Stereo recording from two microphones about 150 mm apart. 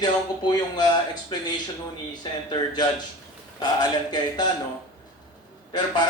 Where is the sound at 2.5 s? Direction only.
30° left (ahead or behind).